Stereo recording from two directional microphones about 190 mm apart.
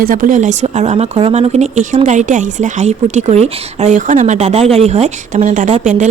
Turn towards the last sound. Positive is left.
turn(degrees=-40)  # may be behind; listen again after turning